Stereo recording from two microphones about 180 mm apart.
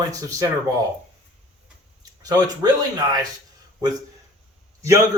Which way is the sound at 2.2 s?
20° right (ahead or behind).